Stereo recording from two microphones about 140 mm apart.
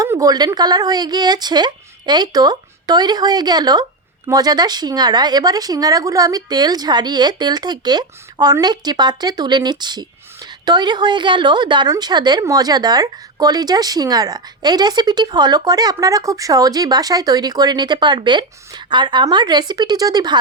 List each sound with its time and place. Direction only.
0.0 s speech: 25° right (ahead or behind)